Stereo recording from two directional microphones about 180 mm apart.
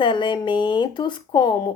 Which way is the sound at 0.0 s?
25° left (ahead or behind).